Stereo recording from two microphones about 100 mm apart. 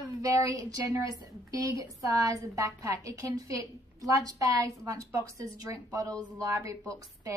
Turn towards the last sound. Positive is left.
turn(degrees=-35)  # may be behind; listen again after turning